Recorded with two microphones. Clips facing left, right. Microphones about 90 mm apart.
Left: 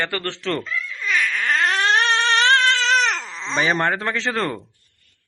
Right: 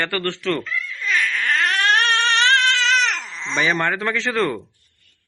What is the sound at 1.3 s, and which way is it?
Crying, 30° left (ahead or behind).